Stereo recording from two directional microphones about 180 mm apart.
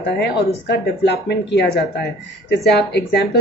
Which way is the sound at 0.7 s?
70° left (ahead or behind).